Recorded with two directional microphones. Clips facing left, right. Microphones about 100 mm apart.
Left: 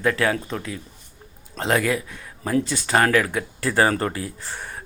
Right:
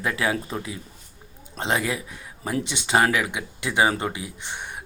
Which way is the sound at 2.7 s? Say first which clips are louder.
Even; 20° right (ahead or behind).